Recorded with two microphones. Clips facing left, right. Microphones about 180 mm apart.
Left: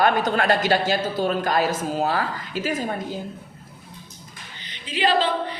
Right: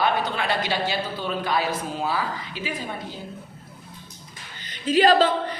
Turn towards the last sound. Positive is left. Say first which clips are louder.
# right 3 dB
turn(degrees=-45)  # may be behind; listen again after turning